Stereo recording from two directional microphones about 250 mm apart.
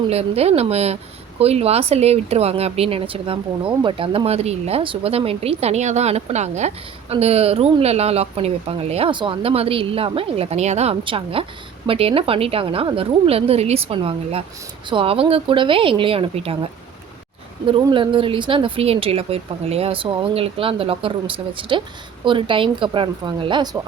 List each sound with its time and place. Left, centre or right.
0.1 s speech: right
17.7 s speech: centre